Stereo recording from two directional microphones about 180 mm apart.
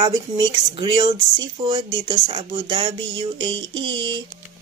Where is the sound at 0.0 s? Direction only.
25° right (ahead or behind).